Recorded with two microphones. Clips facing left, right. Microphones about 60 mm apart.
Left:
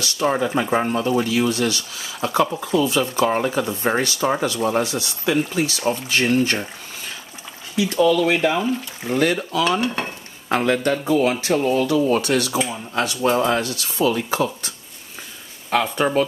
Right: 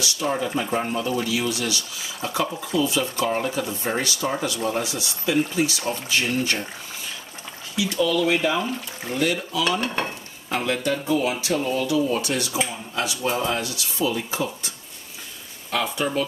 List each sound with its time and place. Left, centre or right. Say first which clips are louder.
0.0 s speech: left 4 dB; left
2.2 s speech: left 6 dB; left
2.6 s speech: left 4 dB; left
4.8 s speech: left 4 dB; left
7.7 s speech: left 5 dB; left
8.4 s speech: left 3 dB; left
9.1 s speech: left 4 dB; left
9.7 s stir: left 3 dB; centre
10.5 s speech: left 5 dB; left
15.7 s speech: left 5 dB; left